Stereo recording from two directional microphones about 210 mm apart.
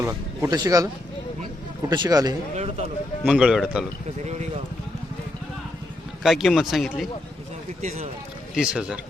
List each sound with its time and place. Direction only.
0.0 s speech: 15° right (ahead or behind)
1.9 s speech: 20° right (ahead or behind)
3.2 s speech: 5° right (ahead or behind)
6.2 s speech: centre (ahead or behind)
8.5 s speech: 5° right (ahead or behind)